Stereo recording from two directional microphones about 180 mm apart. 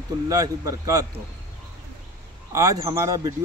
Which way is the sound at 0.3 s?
20° right (ahead or behind).